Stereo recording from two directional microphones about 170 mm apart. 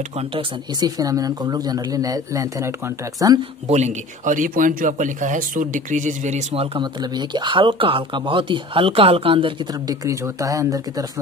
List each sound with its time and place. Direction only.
0.2 s speech: 30° right (ahead or behind)
3.6 s speech: 40° right (ahead or behind); by 11.1 s 20° right (ahead or behind)